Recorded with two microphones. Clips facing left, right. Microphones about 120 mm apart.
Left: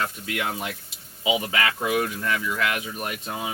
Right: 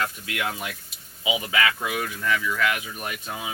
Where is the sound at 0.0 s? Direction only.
25° left (ahead or behind).